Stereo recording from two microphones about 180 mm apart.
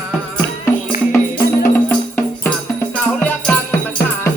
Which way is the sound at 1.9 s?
10° left (ahead or behind).